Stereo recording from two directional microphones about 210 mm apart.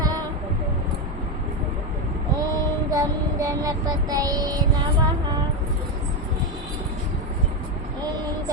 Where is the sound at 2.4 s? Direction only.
15° right (ahead or behind).